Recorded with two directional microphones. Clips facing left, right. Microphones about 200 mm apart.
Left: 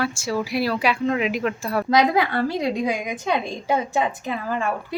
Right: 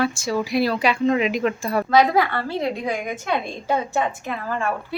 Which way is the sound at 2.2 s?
15° left (ahead or behind).